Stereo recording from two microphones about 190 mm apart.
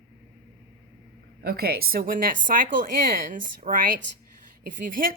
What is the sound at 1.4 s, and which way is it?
A woman's voice, 55° right (ahead or behind).